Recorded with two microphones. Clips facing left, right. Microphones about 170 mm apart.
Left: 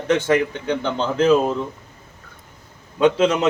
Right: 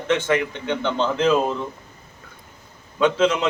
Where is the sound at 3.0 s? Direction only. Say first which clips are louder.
Left 2 dB; 40° left (ahead or behind).